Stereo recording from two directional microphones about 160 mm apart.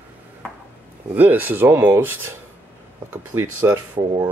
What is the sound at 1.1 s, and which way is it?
Speech, 10° right (ahead or behind).